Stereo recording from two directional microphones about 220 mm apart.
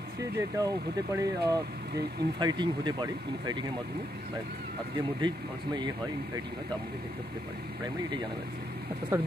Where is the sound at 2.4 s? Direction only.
20° right (ahead or behind).